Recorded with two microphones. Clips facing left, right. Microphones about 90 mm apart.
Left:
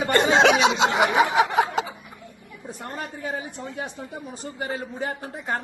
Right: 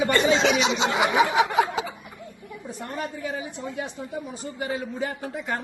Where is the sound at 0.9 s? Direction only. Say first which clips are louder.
Left 1 dB; 50° left (ahead or behind).